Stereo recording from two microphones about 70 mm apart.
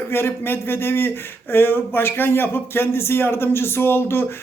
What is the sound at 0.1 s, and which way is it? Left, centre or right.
Speech, left.